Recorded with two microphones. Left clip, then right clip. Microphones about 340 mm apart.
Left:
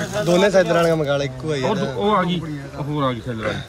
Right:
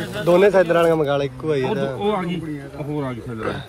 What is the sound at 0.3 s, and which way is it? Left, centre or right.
Speech, centre.